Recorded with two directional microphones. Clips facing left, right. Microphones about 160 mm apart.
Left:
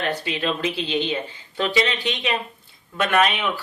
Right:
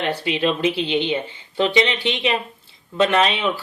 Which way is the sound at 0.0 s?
25° right (ahead or behind).